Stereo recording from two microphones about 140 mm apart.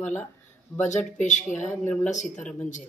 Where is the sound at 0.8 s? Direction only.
60° left (ahead or behind).